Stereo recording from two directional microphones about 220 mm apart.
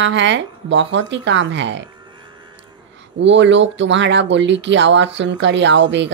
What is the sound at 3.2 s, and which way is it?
Speech, 55° right (ahead or behind).